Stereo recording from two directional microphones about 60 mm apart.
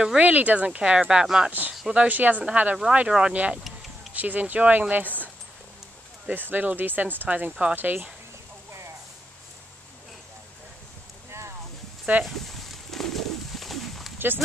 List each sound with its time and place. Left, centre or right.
0.2 s speech: right; by 1.5 s centre
2.0 s speech: right
12.1 s speech: right
12.4 s bird: centre
14.1 s a sound: right